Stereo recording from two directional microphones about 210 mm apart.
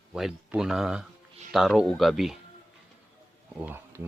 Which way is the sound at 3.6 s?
10° right (ahead or behind).